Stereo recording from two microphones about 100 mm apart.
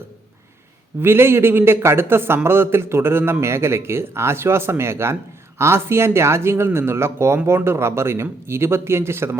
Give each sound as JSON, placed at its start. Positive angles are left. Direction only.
{"t": 1.0, "sound": "a man's voice", "side_deg": -25}